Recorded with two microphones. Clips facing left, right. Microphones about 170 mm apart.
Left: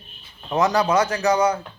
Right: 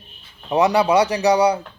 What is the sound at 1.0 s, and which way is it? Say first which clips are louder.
Speech: right 3 dB; 35° right (ahead or behind).